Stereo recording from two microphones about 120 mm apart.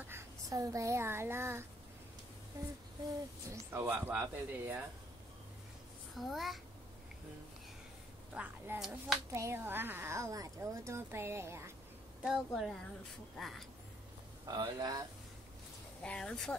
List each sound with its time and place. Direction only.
0.5 s speech: 25° right (ahead or behind)
3.4 s speech: 20° right (ahead or behind)
6.1 s a woman's voice: centre (ahead or behind)
8.4 s a woman's voice: 10° right (ahead or behind)
9.3 s speech: 20° right (ahead or behind)
12.2 s a woman's voice: centre (ahead or behind)
14.4 s speech: 35° right (ahead or behind)
16.0 s speech: 10° left (ahead or behind)